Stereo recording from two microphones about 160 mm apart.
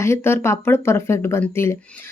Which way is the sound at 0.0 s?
15° left (ahead or behind).